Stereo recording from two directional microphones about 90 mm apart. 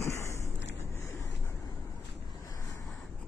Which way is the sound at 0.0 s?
35° left (ahead or behind).